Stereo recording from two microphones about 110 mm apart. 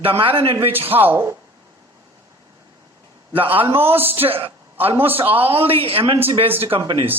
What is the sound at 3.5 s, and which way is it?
A man's voice, 55° right (ahead or behind).